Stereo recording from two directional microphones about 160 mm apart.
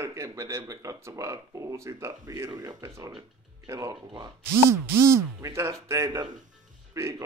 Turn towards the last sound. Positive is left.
turn(degrees=-20)  # may be behind; listen again after turning